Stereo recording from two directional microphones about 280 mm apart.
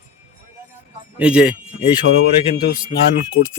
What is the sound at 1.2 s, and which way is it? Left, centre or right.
Speech, centre.